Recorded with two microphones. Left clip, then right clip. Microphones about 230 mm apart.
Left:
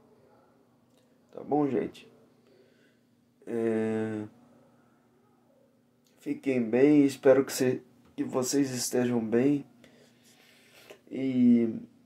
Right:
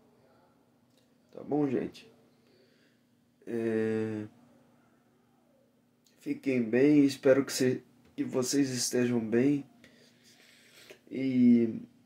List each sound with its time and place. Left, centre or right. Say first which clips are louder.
1.3 s speech: left 3 dB; centre
3.4 s speech: left 2 dB; centre
6.2 s speech: left 2 dB; centre
8.2 s a sound: left 1 dB; centre